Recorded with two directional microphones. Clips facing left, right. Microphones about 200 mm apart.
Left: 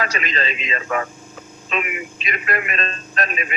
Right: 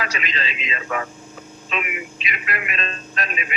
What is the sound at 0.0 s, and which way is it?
A man's voice, 45° left (ahead or behind).